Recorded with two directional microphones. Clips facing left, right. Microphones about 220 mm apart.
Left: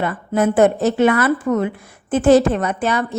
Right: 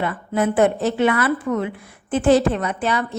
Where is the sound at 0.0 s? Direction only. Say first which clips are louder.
Left 3 dB; 45° left (ahead or behind).